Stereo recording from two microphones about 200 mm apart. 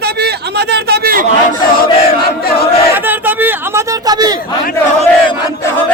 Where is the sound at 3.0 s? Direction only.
10° right (ahead or behind).